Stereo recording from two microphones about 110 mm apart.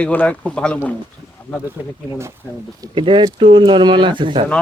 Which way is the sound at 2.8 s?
50° right (ahead or behind).